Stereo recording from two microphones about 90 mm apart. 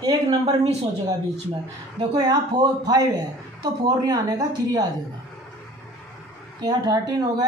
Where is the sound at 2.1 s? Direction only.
45° right (ahead or behind).